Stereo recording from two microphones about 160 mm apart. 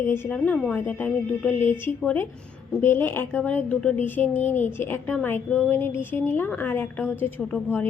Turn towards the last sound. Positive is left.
turn(degrees=5)  # may be behind; listen again after turning